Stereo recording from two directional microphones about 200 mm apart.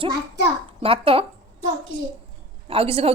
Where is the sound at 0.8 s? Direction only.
30° right (ahead or behind).